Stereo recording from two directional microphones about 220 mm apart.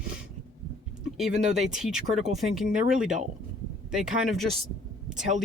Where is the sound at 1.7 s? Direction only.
5° right (ahead or behind).